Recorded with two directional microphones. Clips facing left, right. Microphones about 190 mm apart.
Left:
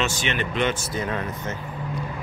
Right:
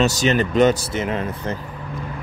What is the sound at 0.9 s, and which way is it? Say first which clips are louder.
Speech: right 4 dB; 25° right (ahead or behind).